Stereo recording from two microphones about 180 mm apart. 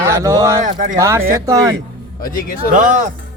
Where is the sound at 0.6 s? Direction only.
45° right (ahead or behind).